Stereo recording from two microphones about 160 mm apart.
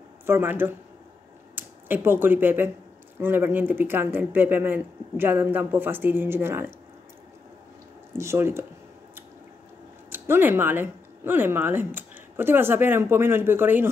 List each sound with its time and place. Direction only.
0.3 s speech: 10° right (ahead or behind)
8.2 s speech: 15° right (ahead or behind)
10.0 s speech: 15° right (ahead or behind)